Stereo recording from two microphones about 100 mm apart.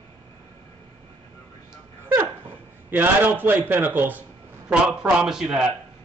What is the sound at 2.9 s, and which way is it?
A man's voice, 20° right (ahead or behind).